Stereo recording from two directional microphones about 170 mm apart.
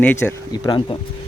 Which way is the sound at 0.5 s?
25° left (ahead or behind).